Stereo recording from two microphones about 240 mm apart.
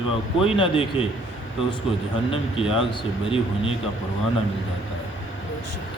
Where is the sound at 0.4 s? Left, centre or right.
Left.